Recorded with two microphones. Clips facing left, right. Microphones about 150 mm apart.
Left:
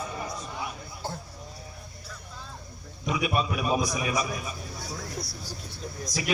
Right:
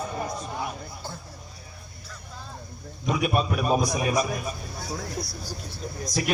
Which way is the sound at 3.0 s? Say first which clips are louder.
Right 3 dB; 45° right (ahead or behind).